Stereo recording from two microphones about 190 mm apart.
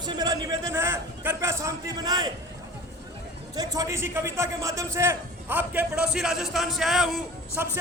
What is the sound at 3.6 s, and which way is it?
A man's voice, 15° right (ahead or behind).